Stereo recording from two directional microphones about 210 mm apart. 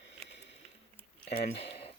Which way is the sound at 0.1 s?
55° left (ahead or behind).